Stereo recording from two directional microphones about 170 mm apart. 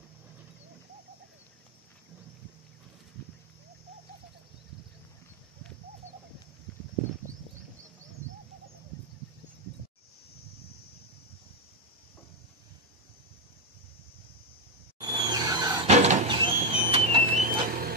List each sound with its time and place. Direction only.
15.0 s a sound: 25° right (ahead or behind)
15.9 s vehicle: 40° right (ahead or behind)
16.3 s vehicle: 30° right (ahead or behind); by 17.9 s 60° right (ahead or behind)